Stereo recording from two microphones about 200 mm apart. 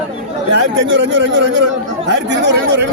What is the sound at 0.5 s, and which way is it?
A man's voice, 65° right (ahead or behind).